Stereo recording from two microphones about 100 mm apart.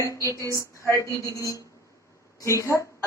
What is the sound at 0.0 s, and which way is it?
A woman's voice, 30° left (ahead or behind).